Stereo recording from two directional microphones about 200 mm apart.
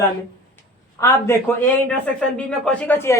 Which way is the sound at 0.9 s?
15° left (ahead or behind).